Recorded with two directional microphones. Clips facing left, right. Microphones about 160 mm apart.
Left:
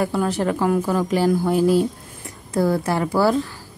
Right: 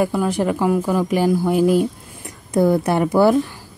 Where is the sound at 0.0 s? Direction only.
10° right (ahead or behind).